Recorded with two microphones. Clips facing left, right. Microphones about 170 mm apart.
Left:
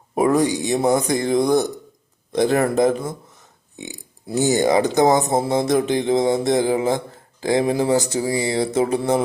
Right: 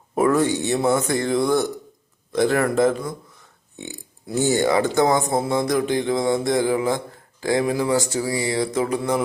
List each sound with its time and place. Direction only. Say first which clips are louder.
0.1 s speech: left 1 dB; 15° left (ahead or behind)